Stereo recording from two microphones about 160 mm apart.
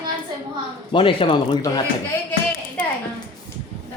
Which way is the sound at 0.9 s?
30° left (ahead or behind).